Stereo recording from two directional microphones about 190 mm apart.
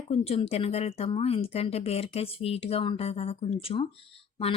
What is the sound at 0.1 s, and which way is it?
Speech, 30° left (ahead or behind).